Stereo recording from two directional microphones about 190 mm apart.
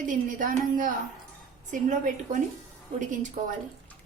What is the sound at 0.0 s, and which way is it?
A woman's voice, 45° right (ahead or behind).